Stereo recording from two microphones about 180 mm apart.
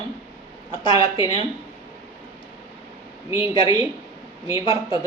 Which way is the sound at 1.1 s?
25° left (ahead or behind).